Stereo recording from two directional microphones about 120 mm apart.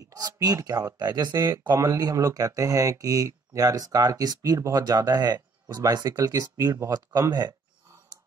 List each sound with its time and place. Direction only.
0.1 s speech: 30° right (ahead or behind)